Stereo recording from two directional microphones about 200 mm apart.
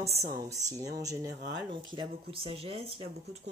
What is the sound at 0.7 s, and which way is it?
Speech, 15° right (ahead or behind).